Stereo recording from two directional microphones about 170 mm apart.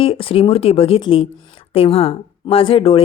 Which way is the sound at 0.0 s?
30° left (ahead or behind).